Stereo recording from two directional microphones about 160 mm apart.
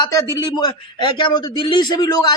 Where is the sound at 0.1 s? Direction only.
20° left (ahead or behind).